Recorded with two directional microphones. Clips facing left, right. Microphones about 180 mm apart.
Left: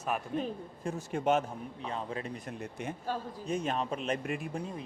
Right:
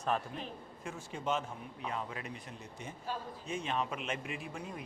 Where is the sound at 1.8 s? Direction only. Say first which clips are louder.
Left 3 dB; 30° left (ahead or behind).